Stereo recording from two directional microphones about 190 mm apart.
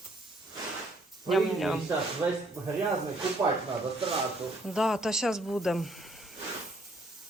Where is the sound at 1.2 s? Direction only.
Centre (ahead or behind).